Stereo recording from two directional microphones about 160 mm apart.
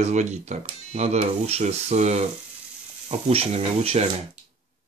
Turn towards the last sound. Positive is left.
turn(degrees=-40)  # may be behind; listen again after turning